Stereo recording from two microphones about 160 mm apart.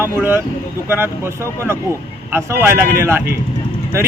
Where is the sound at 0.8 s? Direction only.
15° right (ahead or behind).